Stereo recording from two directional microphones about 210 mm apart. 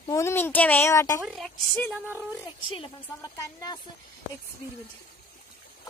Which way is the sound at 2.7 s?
20° left (ahead or behind).